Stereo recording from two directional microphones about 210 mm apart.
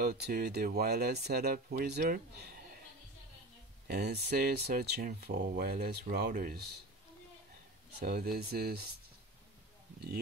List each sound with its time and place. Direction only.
0.0 s speech: 45° right (ahead or behind)
3.8 s speech: 50° right (ahead or behind)
8.0 s speech: 45° right (ahead or behind)